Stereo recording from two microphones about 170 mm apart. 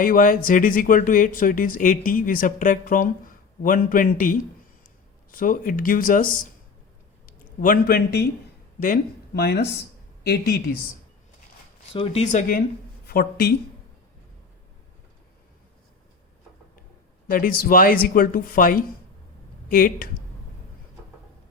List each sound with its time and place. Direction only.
0.0 s a man's voice: 55° left (ahead or behind)
9.3 s speech: 75° left (ahead or behind)
11.9 s a man's voice: 35° left (ahead or behind)
13.1 s speech: 65° left (ahead or behind)
17.2 s speech: 55° left (ahead or behind)